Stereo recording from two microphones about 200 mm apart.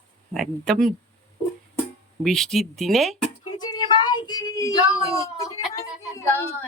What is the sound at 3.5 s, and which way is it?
A woman's voice, 20° left (ahead or behind).